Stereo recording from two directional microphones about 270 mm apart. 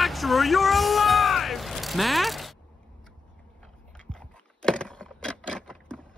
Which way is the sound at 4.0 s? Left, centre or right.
Centre.